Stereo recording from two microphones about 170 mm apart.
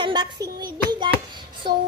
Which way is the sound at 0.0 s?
25° right (ahead or behind).